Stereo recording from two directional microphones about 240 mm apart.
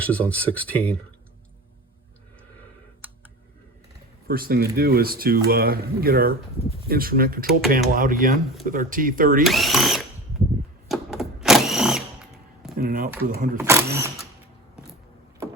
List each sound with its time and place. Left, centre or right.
0.0 s speech: centre
4.3 s speech: right
9.4 s speech: centre
10.8 s a sound: centre
12.7 s speech: right
13.6 s speech: centre